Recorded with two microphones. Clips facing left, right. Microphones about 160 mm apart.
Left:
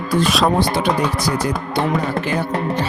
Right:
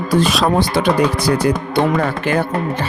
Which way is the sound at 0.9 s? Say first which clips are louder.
Right 4 dB; 65° right (ahead or behind).